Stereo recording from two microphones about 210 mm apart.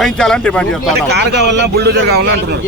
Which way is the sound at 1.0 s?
50° right (ahead or behind).